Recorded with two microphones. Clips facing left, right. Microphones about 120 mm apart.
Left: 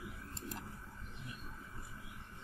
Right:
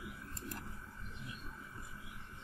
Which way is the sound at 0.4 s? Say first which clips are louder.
Left 1 dB; 20° left (ahead or behind).